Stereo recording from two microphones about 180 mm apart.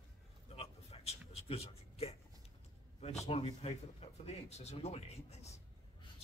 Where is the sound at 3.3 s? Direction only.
35° left (ahead or behind).